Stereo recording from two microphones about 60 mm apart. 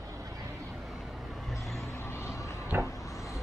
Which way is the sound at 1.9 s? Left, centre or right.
Left.